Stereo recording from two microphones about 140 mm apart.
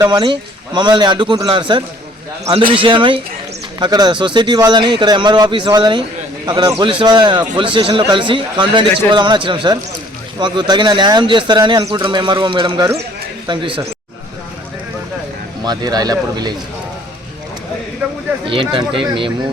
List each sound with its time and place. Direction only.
0.0 s a man's voice: 30° right (ahead or behind)
15.6 s speech: 30° right (ahead or behind)
18.0 s speech: 10° right (ahead or behind)
18.4 s a man's voice: 35° right (ahead or behind)